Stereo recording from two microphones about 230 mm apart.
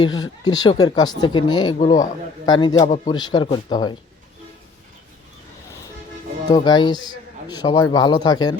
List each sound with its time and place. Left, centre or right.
0.0 s speech: centre
6.5 s speech: centre